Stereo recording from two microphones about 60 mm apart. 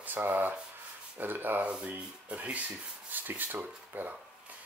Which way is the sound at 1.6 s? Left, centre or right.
Centre.